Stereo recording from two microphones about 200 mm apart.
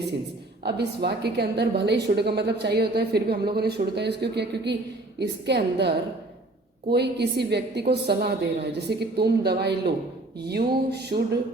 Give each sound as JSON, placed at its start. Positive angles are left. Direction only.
{"t": 0.6, "sound": "a woman's voice", "side_deg": -55}
{"t": 6.9, "sound": "a woman's voice", "side_deg": -55}
{"t": 10.4, "sound": "a sound", "side_deg": -55}